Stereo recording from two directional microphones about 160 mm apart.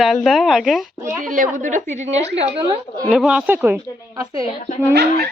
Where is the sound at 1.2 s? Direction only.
55° right (ahead or behind).